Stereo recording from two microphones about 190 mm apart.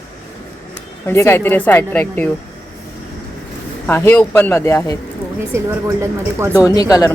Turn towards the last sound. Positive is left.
turn(degrees=20)  # may be behind; listen again after turning